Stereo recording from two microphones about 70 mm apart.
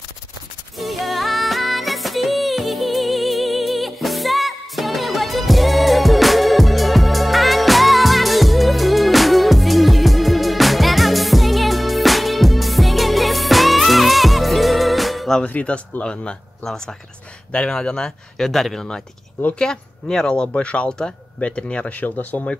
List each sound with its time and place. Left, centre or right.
0.7 s music: centre
15.4 s speech: centre